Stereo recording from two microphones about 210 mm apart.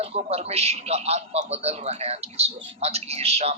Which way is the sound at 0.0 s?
30° right (ahead or behind).